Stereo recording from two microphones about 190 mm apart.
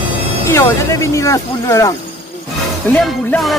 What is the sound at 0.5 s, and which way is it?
Speech, 15° left (ahead or behind).